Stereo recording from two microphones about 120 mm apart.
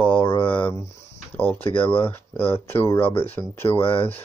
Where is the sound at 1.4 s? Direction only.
15° left (ahead or behind).